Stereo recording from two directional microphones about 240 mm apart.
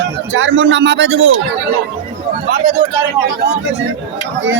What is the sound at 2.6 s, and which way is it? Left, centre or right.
Speech, right.